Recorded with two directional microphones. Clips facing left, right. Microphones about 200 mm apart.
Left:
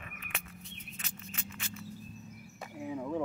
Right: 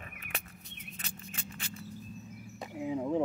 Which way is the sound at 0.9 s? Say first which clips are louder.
Right 2 dB; 35° right (ahead or behind).